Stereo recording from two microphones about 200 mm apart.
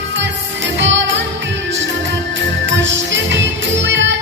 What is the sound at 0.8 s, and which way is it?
Music, 65° right (ahead or behind).